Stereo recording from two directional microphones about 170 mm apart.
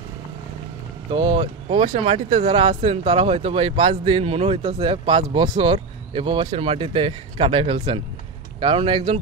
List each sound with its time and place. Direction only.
1.1 s speech: 30° right (ahead or behind)